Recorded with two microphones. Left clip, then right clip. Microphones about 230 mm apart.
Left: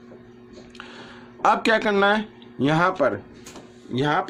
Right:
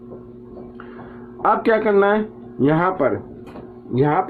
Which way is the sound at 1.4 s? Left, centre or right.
Left.